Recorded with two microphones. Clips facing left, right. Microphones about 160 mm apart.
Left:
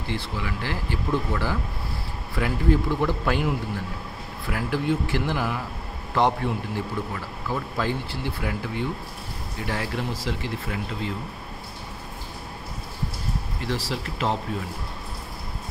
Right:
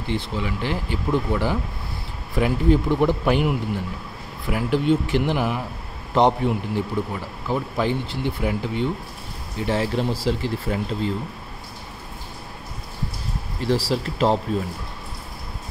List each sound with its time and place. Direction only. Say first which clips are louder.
0.1 s a man's voice: right 5 dB; 20° right (ahead or behind)
13.6 s speech: right 8 dB; 30° right (ahead or behind)